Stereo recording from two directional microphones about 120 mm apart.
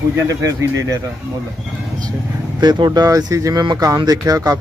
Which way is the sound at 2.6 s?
35° right (ahead or behind).